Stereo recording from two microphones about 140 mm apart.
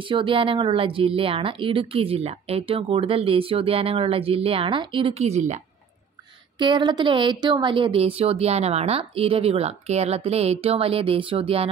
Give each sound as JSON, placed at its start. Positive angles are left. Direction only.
{"t": 0.0, "sound": "speech", "side_deg": -35}
{"t": 6.6, "sound": "speech", "side_deg": -35}